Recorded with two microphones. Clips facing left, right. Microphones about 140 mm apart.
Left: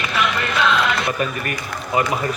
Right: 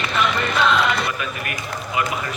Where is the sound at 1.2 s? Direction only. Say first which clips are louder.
Left 5 dB; 40° left (ahead or behind).